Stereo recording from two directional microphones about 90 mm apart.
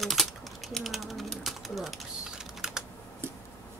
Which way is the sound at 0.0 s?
Centre (ahead or behind).